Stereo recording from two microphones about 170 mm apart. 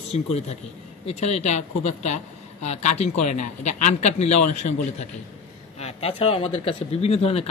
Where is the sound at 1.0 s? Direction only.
40° left (ahead or behind).